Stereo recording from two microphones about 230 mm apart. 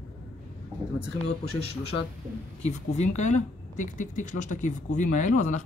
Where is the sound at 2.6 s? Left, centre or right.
Left.